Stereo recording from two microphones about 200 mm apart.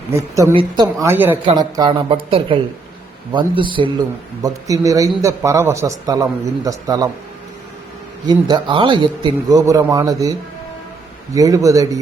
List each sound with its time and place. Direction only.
0.1 s a man's voice: 15° right (ahead or behind)
1.5 s a man's voice: 20° right (ahead or behind)
8.3 s speech: 20° right (ahead or behind)
11.3 s a man's voice: 15° right (ahead or behind)